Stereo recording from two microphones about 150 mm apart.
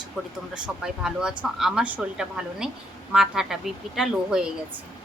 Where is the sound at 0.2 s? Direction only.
5° right (ahead or behind).